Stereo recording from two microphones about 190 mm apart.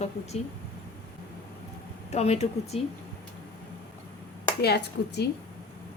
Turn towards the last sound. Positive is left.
turn(degrees=60)  # may be behind; listen again after turning